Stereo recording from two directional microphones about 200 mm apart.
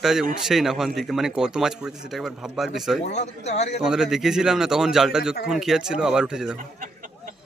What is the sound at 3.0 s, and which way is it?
Speech, 35° left (ahead or behind).